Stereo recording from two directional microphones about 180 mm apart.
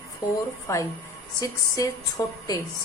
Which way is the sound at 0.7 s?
15° left (ahead or behind).